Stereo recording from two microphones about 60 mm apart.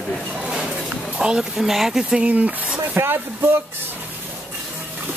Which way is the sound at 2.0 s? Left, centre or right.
Centre.